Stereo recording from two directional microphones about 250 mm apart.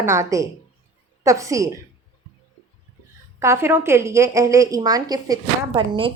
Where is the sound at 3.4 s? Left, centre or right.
Centre.